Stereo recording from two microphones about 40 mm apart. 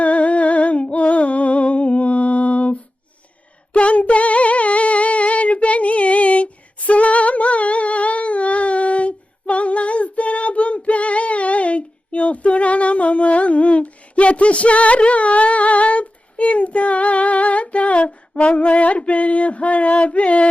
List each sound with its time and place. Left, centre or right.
0.0 s music: left
3.7 s female singing: left